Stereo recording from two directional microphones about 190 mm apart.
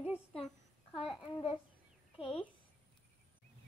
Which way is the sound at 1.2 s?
30° left (ahead or behind).